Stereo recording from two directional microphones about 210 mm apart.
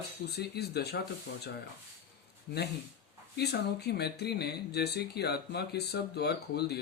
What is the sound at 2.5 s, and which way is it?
Speech, 50° left (ahead or behind).